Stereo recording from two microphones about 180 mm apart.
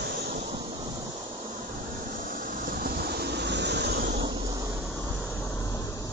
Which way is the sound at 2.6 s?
55° right (ahead or behind).